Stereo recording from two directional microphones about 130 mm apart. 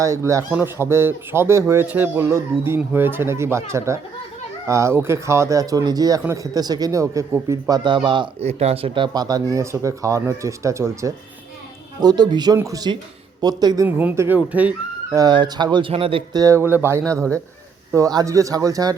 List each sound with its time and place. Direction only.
0.0 s speech: 25° right (ahead or behind)
7.9 s speech: 40° right (ahead or behind)
8.4 s speech: 55° right (ahead or behind)
9.1 s speech: 30° right (ahead or behind)
13.8 s speech: 15° right (ahead or behind)
15.1 s speech: 35° right (ahead or behind)
15.9 s speech: 45° right (ahead or behind)
16.3 s speech: 25° right (ahead or behind)
17.9 s speech: 25° right (ahead or behind)